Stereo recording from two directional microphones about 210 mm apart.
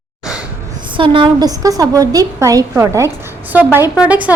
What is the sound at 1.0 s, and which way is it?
A woman's voice, 25° right (ahead or behind).